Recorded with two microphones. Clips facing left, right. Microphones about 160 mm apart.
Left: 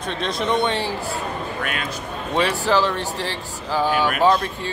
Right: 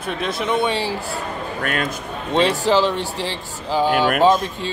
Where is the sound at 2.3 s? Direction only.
20° right (ahead or behind).